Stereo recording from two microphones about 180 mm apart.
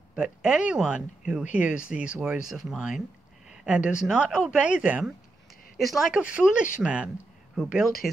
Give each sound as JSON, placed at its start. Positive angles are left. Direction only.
{"t": 0.1, "sound": "speech", "side_deg": -5}